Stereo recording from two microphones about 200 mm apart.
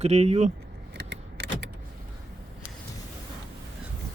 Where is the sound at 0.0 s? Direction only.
30° right (ahead or behind).